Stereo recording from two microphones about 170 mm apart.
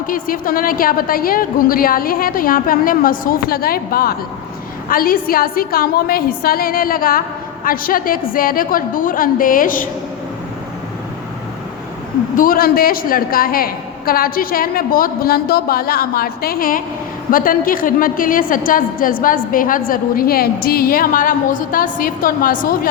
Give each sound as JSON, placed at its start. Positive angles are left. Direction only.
{"t": 0.1, "sound": "a woman's voice", "side_deg": 55}
{"t": 12.4, "sound": "a woman's voice", "side_deg": 60}